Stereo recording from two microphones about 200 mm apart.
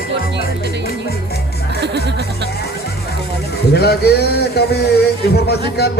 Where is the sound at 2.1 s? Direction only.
55° right (ahead or behind).